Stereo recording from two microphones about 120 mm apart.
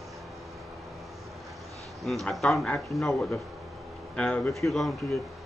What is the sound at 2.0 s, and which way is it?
Speech, centre (ahead or behind).